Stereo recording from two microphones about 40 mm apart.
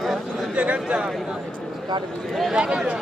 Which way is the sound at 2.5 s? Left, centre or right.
Right.